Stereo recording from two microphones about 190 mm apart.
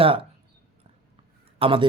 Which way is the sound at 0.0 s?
30° right (ahead or behind).